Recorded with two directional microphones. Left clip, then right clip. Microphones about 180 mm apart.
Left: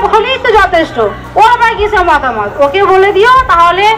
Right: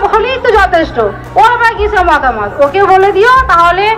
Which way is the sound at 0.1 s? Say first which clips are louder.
Left 1 dB; 55° left (ahead or behind).